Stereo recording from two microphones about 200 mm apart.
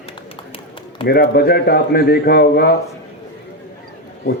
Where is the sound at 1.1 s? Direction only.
50° left (ahead or behind).